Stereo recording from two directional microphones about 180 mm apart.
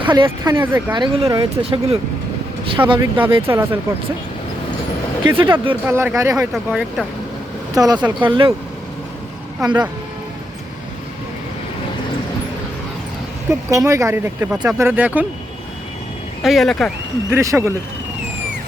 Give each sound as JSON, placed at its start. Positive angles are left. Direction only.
{"t": 0.0, "sound": "speech", "side_deg": -25}
{"t": 0.3, "sound": "speech", "side_deg": -15}
{"t": 0.9, "sound": "speech", "side_deg": -30}
{"t": 1.3, "sound": "speech", "side_deg": -20}
{"t": 3.5, "sound": "speech", "side_deg": -10}
{"t": 5.4, "sound": "speech", "side_deg": -30}
{"t": 5.8, "sound": "speech", "side_deg": -10}
{"t": 6.5, "sound": "speech", "side_deg": -5}
{"t": 7.8, "sound": "speech", "side_deg": -20}
{"t": 9.6, "sound": "speech", "side_deg": -20}
{"t": 13.5, "sound": "speech", "side_deg": -20}
{"t": 14.5, "sound": "speech", "side_deg": -5}
{"t": 16.4, "sound": "speech", "side_deg": 0}
{"t": 17.3, "sound": "speech", "side_deg": -15}